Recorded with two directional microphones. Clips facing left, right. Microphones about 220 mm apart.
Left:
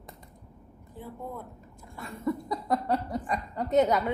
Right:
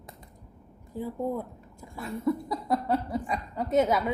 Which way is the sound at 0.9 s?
40° right (ahead or behind).